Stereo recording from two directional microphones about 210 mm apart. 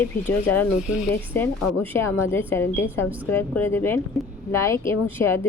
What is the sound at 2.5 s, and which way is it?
A woman's voice, 10° left (ahead or behind).